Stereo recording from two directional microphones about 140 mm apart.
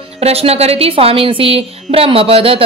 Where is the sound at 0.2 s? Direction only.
45° right (ahead or behind).